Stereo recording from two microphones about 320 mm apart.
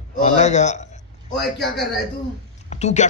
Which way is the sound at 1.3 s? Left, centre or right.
Centre.